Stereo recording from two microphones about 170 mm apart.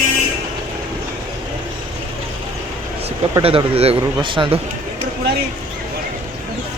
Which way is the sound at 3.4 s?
35° right (ahead or behind).